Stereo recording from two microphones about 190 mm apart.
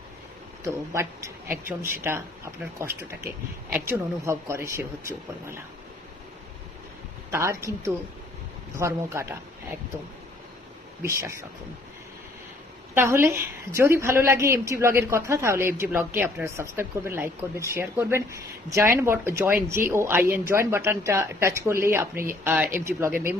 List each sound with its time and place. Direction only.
1.5 s a woman's voice: 10° right (ahead or behind)
7.3 s speech: 15° right (ahead or behind)
8.8 s a woman's voice: 15° right (ahead or behind)
11.0 s a woman's voice: 15° right (ahead or behind)
12.9 s a woman's voice: 10° right (ahead or behind)